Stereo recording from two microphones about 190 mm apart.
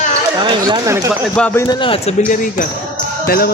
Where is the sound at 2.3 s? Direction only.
45° left (ahead or behind).